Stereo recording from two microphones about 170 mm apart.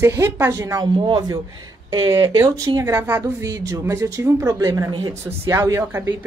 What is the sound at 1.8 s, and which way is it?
A woman's voice, 20° right (ahead or behind).